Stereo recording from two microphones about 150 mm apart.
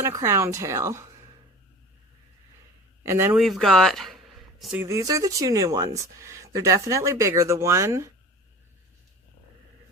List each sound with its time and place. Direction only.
0.0 s speech: 20° right (ahead or behind)
3.0 s speech: 15° right (ahead or behind)
3.3 s speech: centre (ahead or behind)
4.8 s speech: 20° right (ahead or behind)